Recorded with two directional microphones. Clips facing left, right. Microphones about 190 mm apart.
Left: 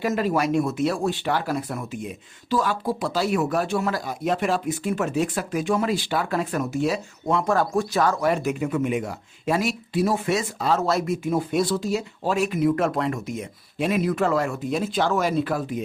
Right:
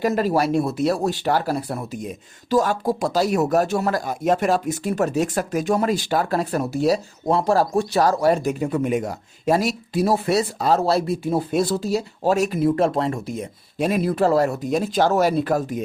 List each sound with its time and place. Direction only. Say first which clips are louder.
0.0 s speech: right 3 dB; 40° right (ahead or behind)